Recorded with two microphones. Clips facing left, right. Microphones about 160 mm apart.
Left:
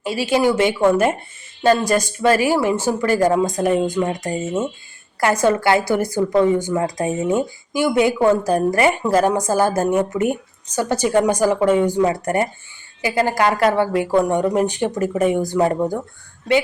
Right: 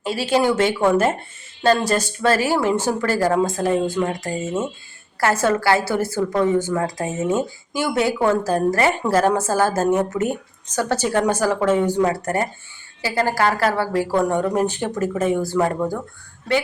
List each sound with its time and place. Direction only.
0.0 s speech: 10° left (ahead or behind)
1.9 s speech: 15° left (ahead or behind)